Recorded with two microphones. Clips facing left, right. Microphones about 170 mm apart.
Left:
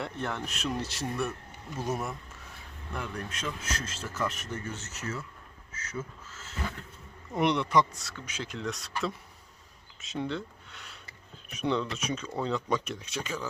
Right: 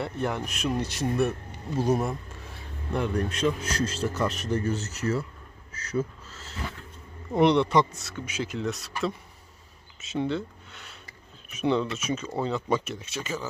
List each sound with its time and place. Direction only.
0.0 s speech: 10° right (ahead or behind)
8.2 s speech: 5° right (ahead or behind)